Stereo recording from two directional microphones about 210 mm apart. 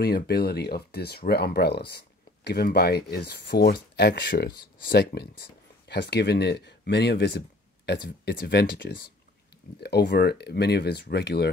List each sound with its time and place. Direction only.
0.0 s speech: 50° left (ahead or behind)